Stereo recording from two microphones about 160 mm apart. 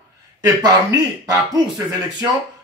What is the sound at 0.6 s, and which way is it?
Speech, 20° right (ahead or behind).